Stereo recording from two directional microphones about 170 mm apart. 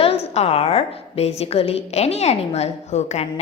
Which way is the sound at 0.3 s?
35° left (ahead or behind).